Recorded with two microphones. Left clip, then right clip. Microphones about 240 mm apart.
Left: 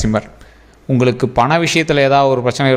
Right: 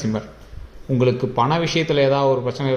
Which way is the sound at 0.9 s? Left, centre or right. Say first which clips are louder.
Left 5 dB; left.